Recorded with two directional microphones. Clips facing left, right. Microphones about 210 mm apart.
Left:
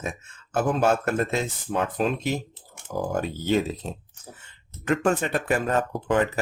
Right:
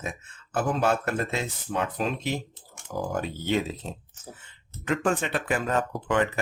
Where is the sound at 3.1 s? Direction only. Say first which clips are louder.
Left 3 dB; 45° left (ahead or behind).